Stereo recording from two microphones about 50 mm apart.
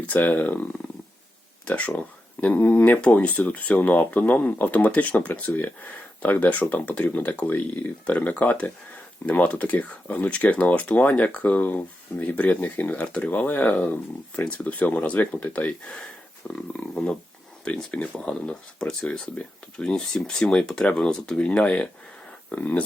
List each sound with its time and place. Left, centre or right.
0.0 s speech: left
2.4 s speech: left